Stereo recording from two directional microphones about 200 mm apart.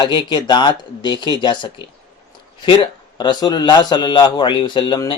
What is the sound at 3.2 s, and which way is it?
Speech, 20° left (ahead or behind).